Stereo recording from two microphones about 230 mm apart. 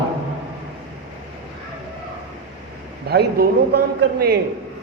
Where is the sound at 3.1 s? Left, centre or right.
Right.